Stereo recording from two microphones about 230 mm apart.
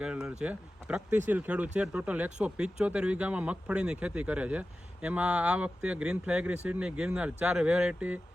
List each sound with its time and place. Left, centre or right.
0.0 s speech: centre